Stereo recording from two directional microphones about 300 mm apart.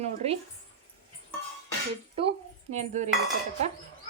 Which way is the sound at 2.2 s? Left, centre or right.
Right.